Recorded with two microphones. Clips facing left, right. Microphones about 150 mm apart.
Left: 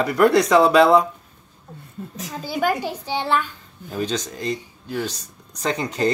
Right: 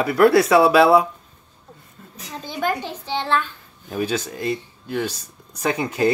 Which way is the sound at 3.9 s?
10° right (ahead or behind).